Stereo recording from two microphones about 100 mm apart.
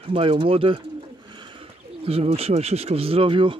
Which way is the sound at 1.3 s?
55° right (ahead or behind).